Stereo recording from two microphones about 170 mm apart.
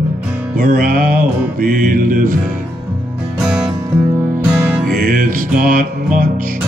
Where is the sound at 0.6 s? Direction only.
55° right (ahead or behind).